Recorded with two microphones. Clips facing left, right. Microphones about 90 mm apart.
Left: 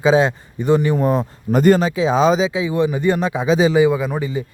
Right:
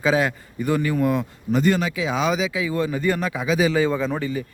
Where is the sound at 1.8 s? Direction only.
30° left (ahead or behind).